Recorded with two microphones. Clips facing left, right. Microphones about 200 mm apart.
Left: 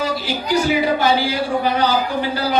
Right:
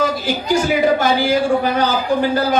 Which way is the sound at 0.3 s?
45° right (ahead or behind).